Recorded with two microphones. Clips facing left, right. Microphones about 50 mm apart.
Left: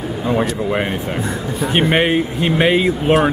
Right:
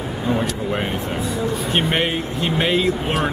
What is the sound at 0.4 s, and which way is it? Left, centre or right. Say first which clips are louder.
Speech: left 4 dB; left.